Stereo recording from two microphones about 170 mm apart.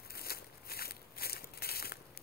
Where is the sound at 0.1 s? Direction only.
65° left (ahead or behind).